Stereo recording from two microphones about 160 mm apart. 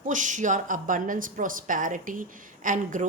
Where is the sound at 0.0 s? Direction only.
50° right (ahead or behind).